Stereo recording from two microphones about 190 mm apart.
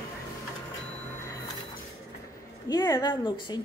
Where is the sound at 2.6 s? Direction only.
20° left (ahead or behind).